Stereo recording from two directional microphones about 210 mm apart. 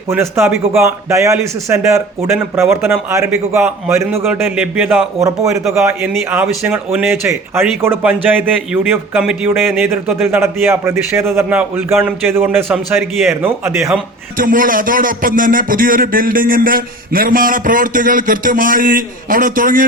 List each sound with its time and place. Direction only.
0.1 s a man's voice: 10° right (ahead or behind)
14.3 s a man's voice: 40° right (ahead or behind)